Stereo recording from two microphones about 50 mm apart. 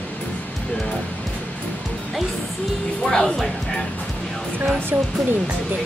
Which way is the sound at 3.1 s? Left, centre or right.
Centre.